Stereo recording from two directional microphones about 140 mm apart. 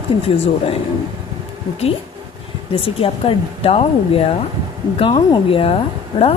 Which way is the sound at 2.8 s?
40° left (ahead or behind).